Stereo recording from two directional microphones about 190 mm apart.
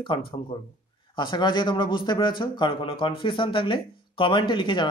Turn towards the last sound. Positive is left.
turn(degrees=25)  # may be behind; listen again after turning